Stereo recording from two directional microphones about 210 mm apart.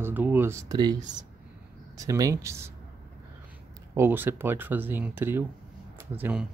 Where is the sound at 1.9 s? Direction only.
15° right (ahead or behind).